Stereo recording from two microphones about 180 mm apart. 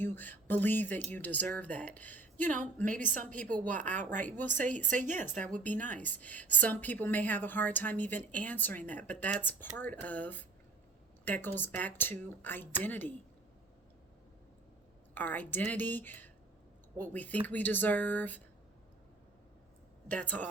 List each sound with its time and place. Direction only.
0.0 s a woman's voice: 10° left (ahead or behind)
2.8 s a woman's voice: 45° right (ahead or behind)
3.2 s a woman's voice: 5° left (ahead or behind)
4.0 s a woman's voice: 45° right (ahead or behind)
4.3 s a woman's voice: 10° left (ahead or behind)
4.9 s a woman's voice: 45° right (ahead or behind)
5.5 s a woman's voice: 10° left (ahead or behind)
15.1 s a woman's voice: 10° left (ahead or behind)
20.1 s a woman's voice: 10° left (ahead or behind)